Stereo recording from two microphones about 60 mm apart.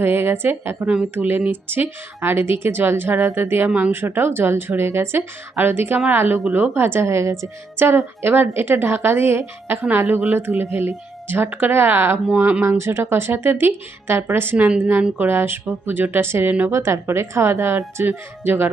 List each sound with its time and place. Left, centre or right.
0.0 s a woman's voice: right
7.8 s a woman's voice: right
12.4 s speech: right
12.6 s a woman's voice: right
16.5 s speech: right
16.7 s a woman's voice: right
18.0 s a woman's voice: right